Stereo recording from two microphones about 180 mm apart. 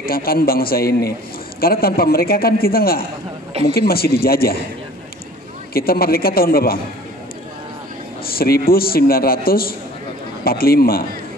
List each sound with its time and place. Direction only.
0.0 s a man's voice: 55° left (ahead or behind)
5.7 s a man's voice: 55° left (ahead or behind)
8.3 s a man's voice: 55° left (ahead or behind)